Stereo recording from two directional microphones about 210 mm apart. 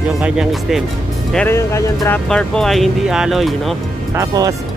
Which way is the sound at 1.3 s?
10° left (ahead or behind).